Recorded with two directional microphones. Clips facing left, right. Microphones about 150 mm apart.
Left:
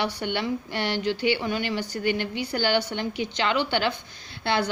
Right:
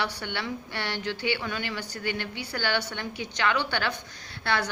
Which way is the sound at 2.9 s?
25° left (ahead or behind).